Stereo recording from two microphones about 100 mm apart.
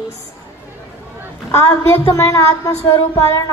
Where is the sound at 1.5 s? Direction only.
30° left (ahead or behind).